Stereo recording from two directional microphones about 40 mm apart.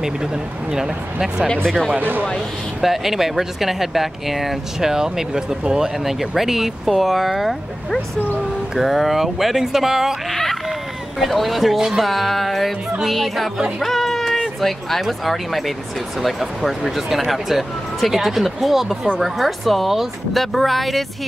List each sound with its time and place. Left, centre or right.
0.0 s speech: centre
2.0 s speech: right
2.8 s speech: centre
8.7 s speech: centre
10.3 s a sound: centre
11.1 s speech: centre